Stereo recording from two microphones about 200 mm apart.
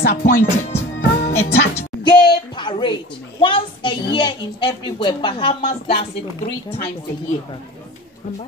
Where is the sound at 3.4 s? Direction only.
25° left (ahead or behind).